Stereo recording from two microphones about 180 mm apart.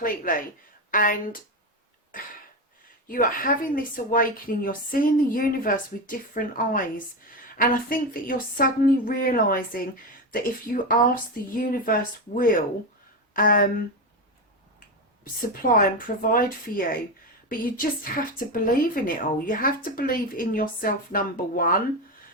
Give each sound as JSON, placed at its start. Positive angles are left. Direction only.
{"t": 0.0, "sound": "a woman's voice", "side_deg": 50}
{"t": 3.1, "sound": "a woman's voice", "side_deg": 50}
{"t": 15.2, "sound": "a woman's voice", "side_deg": 50}